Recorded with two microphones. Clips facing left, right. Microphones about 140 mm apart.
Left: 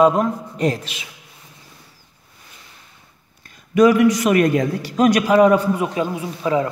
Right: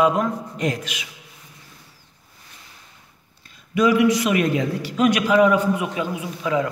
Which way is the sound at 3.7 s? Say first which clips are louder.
Left 4 dB; 45° left (ahead or behind).